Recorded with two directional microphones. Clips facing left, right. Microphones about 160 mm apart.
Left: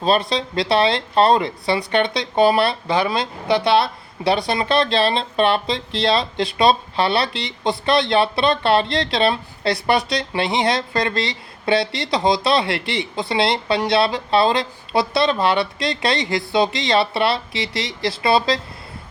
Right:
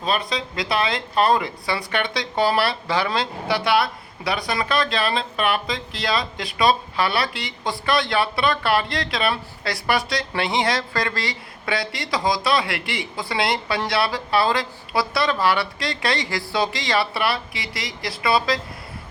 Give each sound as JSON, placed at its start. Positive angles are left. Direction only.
{"t": 0.0, "sound": "speech", "side_deg": 30}